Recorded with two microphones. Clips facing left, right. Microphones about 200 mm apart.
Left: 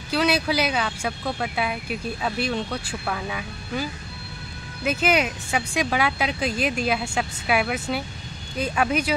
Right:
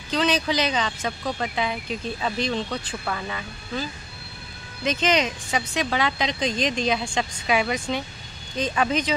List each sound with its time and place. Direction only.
0.1 s speech: 10° left (ahead or behind)